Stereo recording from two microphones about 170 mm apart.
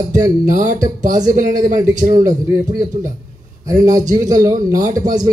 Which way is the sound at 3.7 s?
20° right (ahead or behind).